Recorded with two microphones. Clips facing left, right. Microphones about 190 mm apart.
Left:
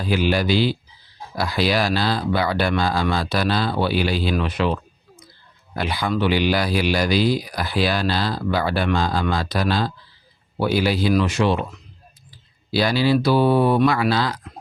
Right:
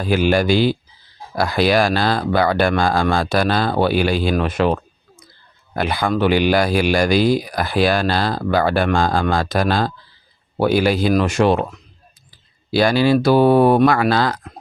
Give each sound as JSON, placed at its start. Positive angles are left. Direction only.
{"t": 0.0, "sound": "speech", "side_deg": -50}
{"t": 12.7, "sound": "speech", "side_deg": -50}